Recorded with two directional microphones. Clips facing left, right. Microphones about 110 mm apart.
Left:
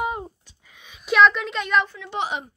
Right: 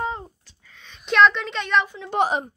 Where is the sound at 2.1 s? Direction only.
45° right (ahead or behind).